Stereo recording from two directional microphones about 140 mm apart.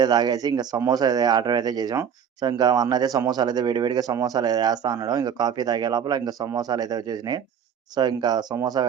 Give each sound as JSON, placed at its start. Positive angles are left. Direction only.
{"t": 0.0, "sound": "speech", "side_deg": -30}